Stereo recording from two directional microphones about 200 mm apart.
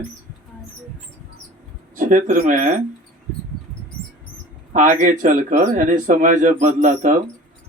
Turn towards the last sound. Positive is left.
turn(degrees=-40)  # may be behind; listen again after turning